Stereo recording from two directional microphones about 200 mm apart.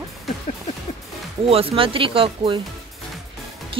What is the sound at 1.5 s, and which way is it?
Speech, 30° right (ahead or behind).